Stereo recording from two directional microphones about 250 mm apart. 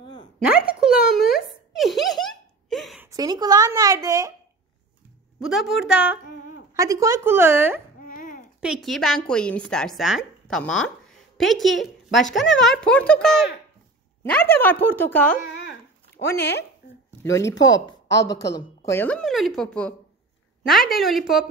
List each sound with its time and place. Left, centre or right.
0.0 s a sound: centre
0.7 s a sound: centre
3.1 s speech: centre
5.4 s a woman's voice: centre
8.0 s babbling: left
8.5 s a woman's voice: centre
15.5 s a sound: left
16.2 s a woman's voice: centre
17.7 s a woman's voice: centre